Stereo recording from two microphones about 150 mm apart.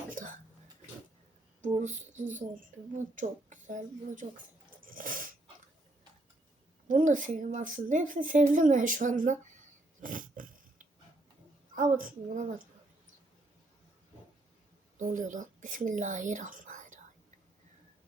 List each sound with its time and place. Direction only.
0.1 s a sound: 65° right (ahead or behind)
1.7 s speech: 50° right (ahead or behind)
4.8 s dog: 65° right (ahead or behind)
6.8 s a woman's voice: 60° right (ahead or behind)
11.7 s speech: 65° right (ahead or behind)
14.9 s speech: 60° right (ahead or behind)